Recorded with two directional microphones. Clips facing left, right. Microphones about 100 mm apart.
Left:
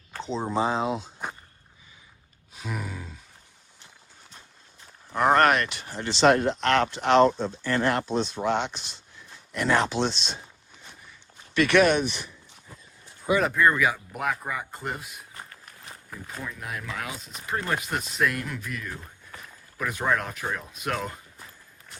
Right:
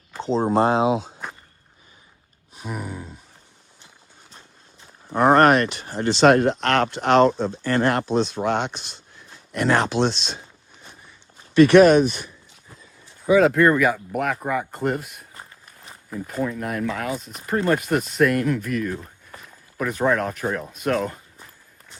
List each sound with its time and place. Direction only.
0.2 s speech: 35° right (ahead or behind)
0.5 s speech: 60° right (ahead or behind); by 0.9 s 75° right (ahead or behind)
2.6 s a sound: 20° right (ahead or behind)
5.0 s speech: 25° right (ahead or behind); by 10.3 s 80° right
11.5 s speech: 35° right (ahead or behind)
13.4 s speech: 75° right (ahead or behind)
13.7 s speech: 50° right (ahead or behind)
15.9 s a sound: centre (ahead or behind)
16.4 s speech: 45° right (ahead or behind)
17.8 s speech: 50° right (ahead or behind)
19.8 s speech: 35° right (ahead or behind)